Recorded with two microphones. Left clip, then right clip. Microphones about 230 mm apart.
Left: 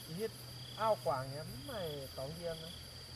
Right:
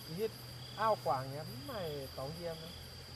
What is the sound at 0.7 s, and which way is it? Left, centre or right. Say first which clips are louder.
Speech: right 1 dB; centre.